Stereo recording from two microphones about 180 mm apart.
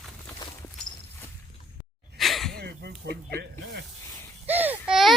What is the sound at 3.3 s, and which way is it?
Snake, 65° right (ahead or behind).